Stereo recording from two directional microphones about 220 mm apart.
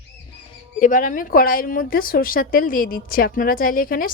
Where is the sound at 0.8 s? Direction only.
35° left (ahead or behind).